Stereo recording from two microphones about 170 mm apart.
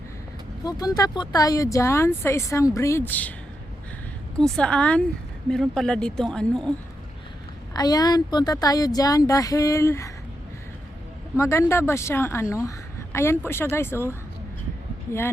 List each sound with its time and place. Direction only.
0.6 s speech: 20° left (ahead or behind)
4.4 s speech: 5° left (ahead or behind)
7.8 s speech: 25° left (ahead or behind)
11.3 s speech: 15° left (ahead or behind)